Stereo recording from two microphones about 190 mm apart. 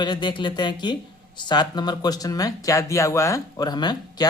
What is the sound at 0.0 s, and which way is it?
Speech, 25° left (ahead or behind).